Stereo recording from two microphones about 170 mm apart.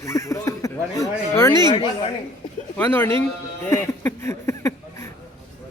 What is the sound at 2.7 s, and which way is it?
Speech, 15° left (ahead or behind).